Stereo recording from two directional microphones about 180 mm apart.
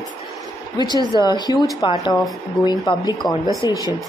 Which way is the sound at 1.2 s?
25° left (ahead or behind).